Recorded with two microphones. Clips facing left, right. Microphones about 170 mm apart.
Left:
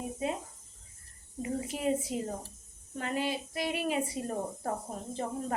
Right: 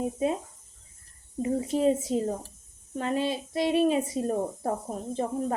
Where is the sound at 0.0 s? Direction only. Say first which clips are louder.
Right 7 dB; 25° right (ahead or behind).